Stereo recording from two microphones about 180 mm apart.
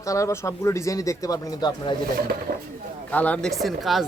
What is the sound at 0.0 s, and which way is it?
Speech, 15° left (ahead or behind).